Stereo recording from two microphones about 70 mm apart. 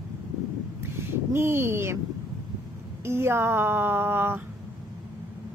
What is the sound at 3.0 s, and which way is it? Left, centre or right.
Speech, right.